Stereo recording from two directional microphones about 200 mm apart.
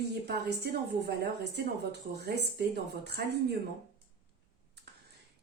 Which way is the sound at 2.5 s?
55° right (ahead or behind).